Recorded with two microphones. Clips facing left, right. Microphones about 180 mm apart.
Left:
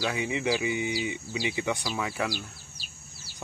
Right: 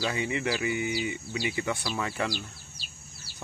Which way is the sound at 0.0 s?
10° left (ahead or behind).